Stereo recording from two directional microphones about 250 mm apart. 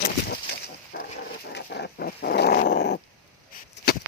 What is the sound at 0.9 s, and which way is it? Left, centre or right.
Dog, left.